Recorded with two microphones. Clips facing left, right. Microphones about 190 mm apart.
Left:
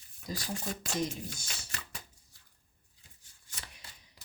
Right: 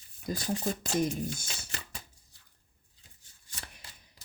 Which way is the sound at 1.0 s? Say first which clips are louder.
Right 4 dB; 55° right (ahead or behind).